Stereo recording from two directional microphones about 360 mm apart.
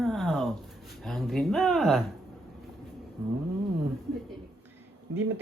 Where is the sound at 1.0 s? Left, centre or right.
Centre.